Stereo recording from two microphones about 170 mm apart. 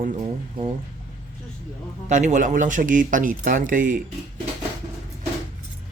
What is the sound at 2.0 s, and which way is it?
Speech, 45° right (ahead or behind).